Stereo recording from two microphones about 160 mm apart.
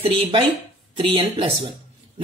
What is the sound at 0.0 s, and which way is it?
Speech, 35° right (ahead or behind).